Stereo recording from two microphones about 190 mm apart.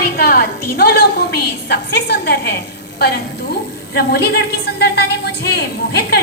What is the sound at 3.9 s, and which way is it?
A woman's voice, 55° left (ahead or behind).